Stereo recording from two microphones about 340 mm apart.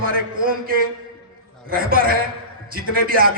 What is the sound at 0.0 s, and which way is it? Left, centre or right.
A man's voice, right.